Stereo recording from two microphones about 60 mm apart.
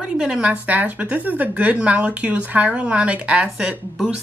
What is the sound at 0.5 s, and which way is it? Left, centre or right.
Speech, right.